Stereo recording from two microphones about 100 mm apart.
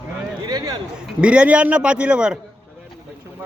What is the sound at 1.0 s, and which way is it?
A man's voice, 10° right (ahead or behind).